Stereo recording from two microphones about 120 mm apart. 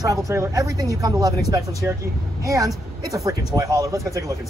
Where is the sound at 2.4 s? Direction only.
25° right (ahead or behind).